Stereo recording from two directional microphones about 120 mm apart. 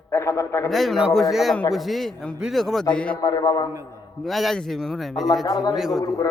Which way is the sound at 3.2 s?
35° left (ahead or behind).